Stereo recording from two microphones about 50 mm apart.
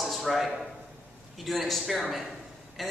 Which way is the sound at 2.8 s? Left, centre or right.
Centre.